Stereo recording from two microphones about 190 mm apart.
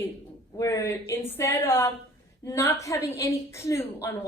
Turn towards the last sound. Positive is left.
turn(degrees=15)  # may be behind; listen again after turning